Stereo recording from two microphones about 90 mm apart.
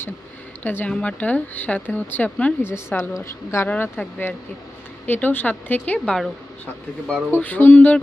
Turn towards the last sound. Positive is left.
turn(degrees=20)  # may be behind; listen again after turning